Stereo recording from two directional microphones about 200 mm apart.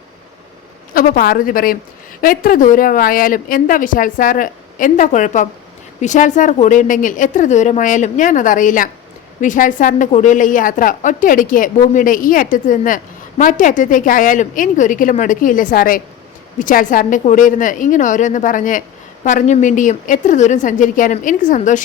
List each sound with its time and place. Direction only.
0.9 s a woman's voice: 45° left (ahead or behind)